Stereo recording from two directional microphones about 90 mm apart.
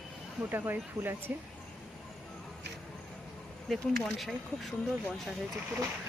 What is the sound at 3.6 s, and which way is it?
Speech, centre (ahead or behind).